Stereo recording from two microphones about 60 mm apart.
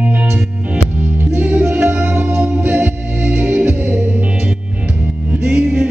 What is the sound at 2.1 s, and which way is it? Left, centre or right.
Music, right.